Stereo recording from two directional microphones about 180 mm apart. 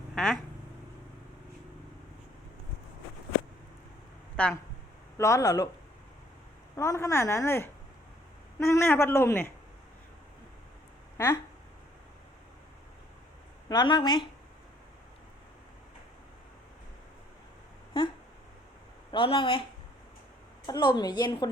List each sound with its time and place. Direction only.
4.4 s a woman's voice: 5° left (ahead or behind)
6.7 s a woman's voice: 15° left (ahead or behind)
13.7 s a woman's voice: 25° left (ahead or behind)
18.0 s a sound: 30° left (ahead or behind)
19.1 s speech: 30° left (ahead or behind)
20.7 s a woman's voice: 25° left (ahead or behind)